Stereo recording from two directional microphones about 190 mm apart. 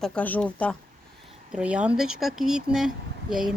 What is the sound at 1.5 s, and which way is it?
Speech, 5° right (ahead or behind).